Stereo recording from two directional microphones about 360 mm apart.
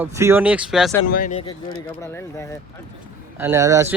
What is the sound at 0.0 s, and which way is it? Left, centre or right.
Speech, centre.